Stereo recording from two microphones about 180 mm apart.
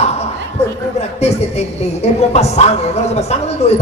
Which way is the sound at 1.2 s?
35° left (ahead or behind).